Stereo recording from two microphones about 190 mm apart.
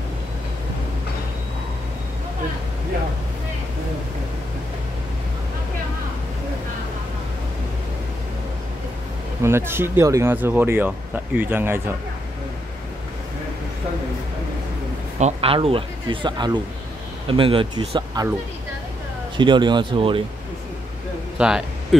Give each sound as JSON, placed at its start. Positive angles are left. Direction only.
{"t": 9.4, "sound": "speech", "side_deg": -15}
{"t": 15.1, "sound": "speech", "side_deg": -35}
{"t": 19.3, "sound": "speech", "side_deg": -25}
{"t": 21.4, "sound": "speech", "side_deg": -5}